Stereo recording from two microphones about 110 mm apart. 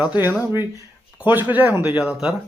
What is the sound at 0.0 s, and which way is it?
Speech, 15° right (ahead or behind).